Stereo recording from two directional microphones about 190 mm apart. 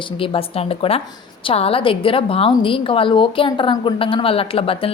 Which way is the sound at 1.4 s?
30° left (ahead or behind).